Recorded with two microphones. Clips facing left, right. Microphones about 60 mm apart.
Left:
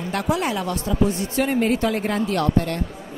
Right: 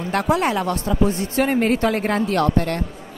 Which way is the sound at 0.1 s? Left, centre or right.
Right.